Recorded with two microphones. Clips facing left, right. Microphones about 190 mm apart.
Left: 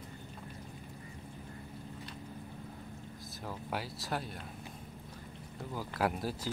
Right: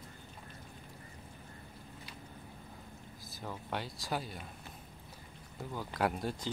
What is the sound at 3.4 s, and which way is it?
Speech, 5° left (ahead or behind).